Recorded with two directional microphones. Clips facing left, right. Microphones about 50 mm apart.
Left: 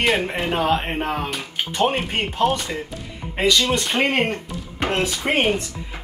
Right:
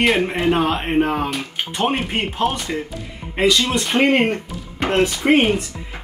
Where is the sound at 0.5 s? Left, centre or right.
Right.